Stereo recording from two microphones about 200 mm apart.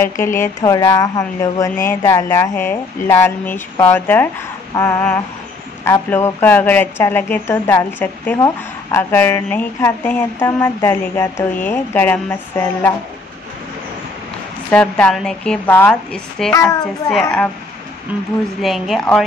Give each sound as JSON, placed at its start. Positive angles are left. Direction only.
{"t": 0.0, "sound": "speech", "side_deg": 15}
{"t": 14.7, "sound": "a woman's voice", "side_deg": 5}
{"t": 18.6, "sound": "a woman's voice", "side_deg": 0}